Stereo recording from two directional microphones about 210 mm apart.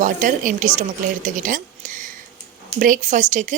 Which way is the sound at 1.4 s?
40° right (ahead or behind).